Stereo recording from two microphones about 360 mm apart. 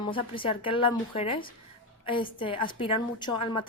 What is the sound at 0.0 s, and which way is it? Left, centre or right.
A woman's voice, centre.